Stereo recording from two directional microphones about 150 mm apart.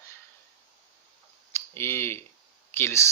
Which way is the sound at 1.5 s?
15° left (ahead or behind).